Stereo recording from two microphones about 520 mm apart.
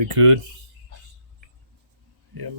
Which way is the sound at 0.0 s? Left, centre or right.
Right.